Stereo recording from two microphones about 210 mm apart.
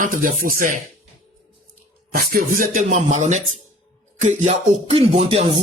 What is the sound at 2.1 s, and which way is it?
Speech, 40° right (ahead or behind).